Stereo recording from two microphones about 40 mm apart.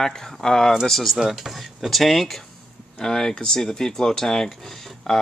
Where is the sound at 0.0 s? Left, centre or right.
Centre.